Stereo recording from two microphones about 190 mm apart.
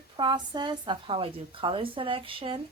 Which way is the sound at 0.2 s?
25° right (ahead or behind).